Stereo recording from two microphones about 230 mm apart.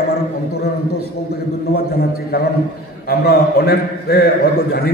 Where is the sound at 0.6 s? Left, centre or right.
Left.